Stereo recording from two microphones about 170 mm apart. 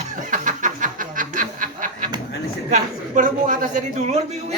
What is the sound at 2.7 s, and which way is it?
A man's voice, 45° right (ahead or behind).